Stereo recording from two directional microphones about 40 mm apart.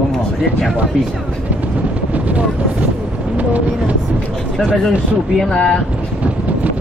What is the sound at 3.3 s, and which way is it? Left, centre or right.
Speech, right.